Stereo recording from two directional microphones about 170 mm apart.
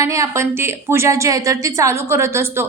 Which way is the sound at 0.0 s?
20° right (ahead or behind).